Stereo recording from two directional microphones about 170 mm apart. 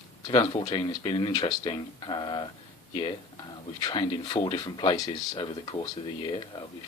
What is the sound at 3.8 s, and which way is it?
Speech, 25° left (ahead or behind).